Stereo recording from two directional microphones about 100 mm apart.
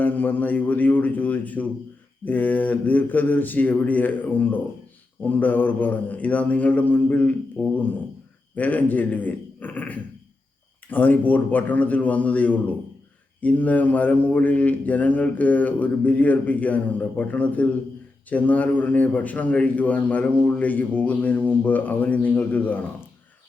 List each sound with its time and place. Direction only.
0.0 s a man's voice: 15° left (ahead or behind)